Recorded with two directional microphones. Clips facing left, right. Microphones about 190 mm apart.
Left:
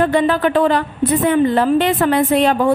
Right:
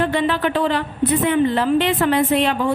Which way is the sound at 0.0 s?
45° left (ahead or behind).